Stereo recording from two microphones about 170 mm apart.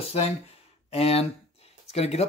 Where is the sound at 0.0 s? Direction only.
35° left (ahead or behind).